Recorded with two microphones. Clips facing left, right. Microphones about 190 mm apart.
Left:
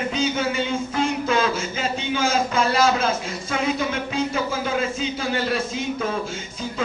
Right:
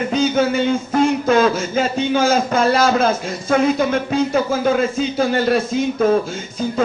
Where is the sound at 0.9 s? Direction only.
45° right (ahead or behind).